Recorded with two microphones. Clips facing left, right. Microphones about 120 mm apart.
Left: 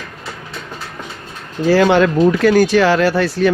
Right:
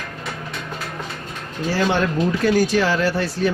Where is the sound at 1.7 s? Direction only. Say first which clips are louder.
Left 8 dB; 90° left.